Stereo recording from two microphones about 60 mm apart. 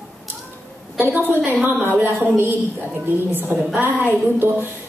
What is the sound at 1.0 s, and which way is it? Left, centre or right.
A woman's voice, right.